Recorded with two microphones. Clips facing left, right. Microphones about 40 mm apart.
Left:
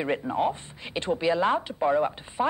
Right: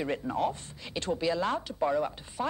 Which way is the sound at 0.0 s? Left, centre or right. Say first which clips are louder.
Left 4 dB; left.